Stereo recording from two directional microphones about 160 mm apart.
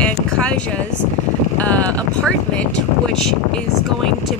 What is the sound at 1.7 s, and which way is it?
Speech, 10° left (ahead or behind).